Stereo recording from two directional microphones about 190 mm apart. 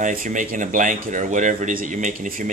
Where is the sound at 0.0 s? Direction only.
45° right (ahead or behind).